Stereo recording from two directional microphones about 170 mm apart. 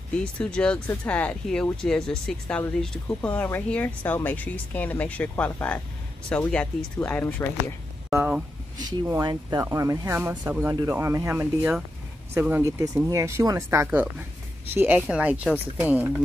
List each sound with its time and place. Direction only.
0.2 s speech: 5° left (ahead or behind)
8.1 s speech: 5° right (ahead or behind)
8.7 s speech: 25° right (ahead or behind); by 16.2 s 10° right (ahead or behind)